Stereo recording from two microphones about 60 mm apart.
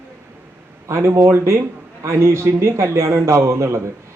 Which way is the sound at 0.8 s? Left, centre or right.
Right.